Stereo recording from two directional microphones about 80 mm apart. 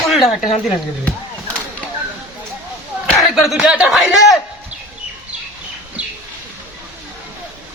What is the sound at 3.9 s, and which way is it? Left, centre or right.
Speech, centre.